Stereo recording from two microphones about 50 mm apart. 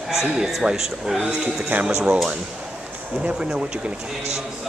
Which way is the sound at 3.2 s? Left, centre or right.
Centre.